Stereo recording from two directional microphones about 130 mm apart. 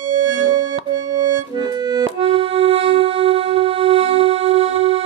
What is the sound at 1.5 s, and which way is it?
Accordion, 30° right (ahead or behind).